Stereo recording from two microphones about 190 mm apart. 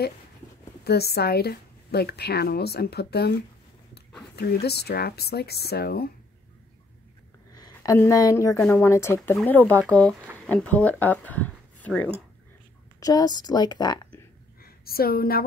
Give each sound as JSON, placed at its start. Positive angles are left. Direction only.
{"t": 0.8, "sound": "a woman's voice", "side_deg": 55}
{"t": 4.4, "sound": "a woman's voice", "side_deg": 55}
{"t": 7.5, "sound": "a woman's voice", "side_deg": 20}
{"t": 13.0, "sound": "a woman's voice", "side_deg": 20}
{"t": 14.6, "sound": "a woman's voice", "side_deg": 50}